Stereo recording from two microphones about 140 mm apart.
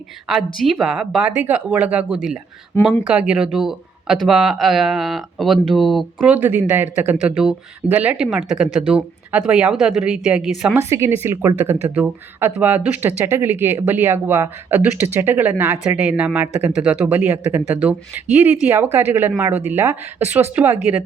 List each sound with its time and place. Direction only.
0.3 s speech: centre (ahead or behind)
2.7 s speech: 15° left (ahead or behind)
3.1 s speech: 10° right (ahead or behind)
6.3 s speech: 15° right (ahead or behind)
10.8 s speech: 20° right (ahead or behind)